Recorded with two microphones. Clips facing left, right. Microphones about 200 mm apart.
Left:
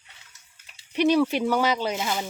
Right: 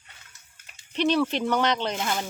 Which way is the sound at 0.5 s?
50° right (ahead or behind).